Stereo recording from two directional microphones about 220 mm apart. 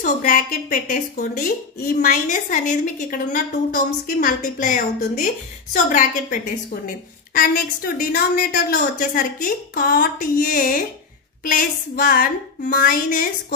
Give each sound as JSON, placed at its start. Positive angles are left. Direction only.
{"t": 0.0, "sound": "a woman's voice", "side_deg": 35}